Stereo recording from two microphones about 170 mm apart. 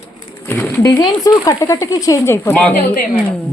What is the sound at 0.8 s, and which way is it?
Speech, 20° left (ahead or behind).